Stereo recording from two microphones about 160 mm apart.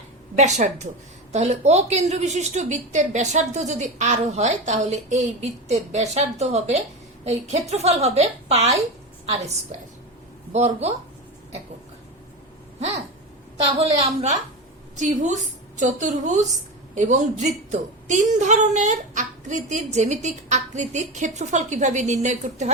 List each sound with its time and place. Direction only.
0.3 s a woman's voice: 45° right (ahead or behind)
10.5 s a woman's voice: 45° right (ahead or behind)
13.7 s a woman's voice: 40° right (ahead or behind)